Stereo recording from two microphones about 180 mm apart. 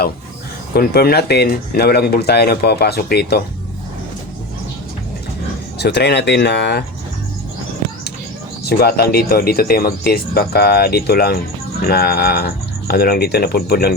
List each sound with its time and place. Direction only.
0.7 s speech: 60° left (ahead or behind)
5.8 s speech: 65° left (ahead or behind)
8.6 s speech: 60° left (ahead or behind)